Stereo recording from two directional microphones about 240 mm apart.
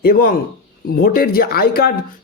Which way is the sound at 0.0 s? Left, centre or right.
Left.